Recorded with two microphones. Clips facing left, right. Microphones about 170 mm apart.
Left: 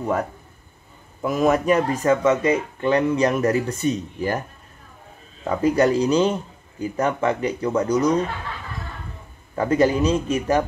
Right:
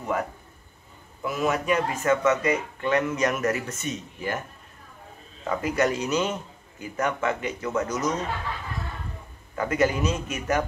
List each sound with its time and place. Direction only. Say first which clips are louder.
1.2 s speech: left 7 dB; 45° left (ahead or behind)
5.4 s speech: left 6 dB; 35° left (ahead or behind)
9.6 s speech: left 5 dB; 30° left (ahead or behind)